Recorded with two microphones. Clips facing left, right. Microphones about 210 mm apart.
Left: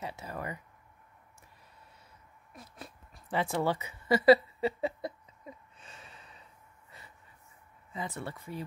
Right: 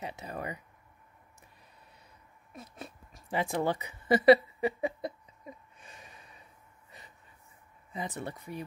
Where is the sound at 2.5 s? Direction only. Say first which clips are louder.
Right 3 dB; 25° right (ahead or behind).